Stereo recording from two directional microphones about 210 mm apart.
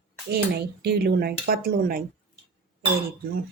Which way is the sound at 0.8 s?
50° right (ahead or behind).